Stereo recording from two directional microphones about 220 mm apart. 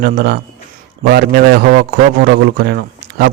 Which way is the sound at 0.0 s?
40° right (ahead or behind).